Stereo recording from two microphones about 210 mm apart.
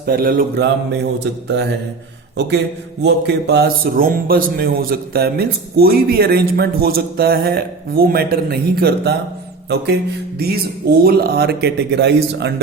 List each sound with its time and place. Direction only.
0.0 s speech: 45° right (ahead or behind)
1.2 s speech: 55° right (ahead or behind)